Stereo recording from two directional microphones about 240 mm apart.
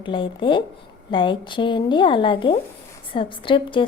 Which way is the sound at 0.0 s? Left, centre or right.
Centre.